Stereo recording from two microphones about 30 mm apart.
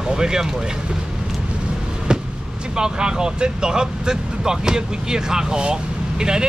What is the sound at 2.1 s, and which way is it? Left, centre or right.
Vehicle, right.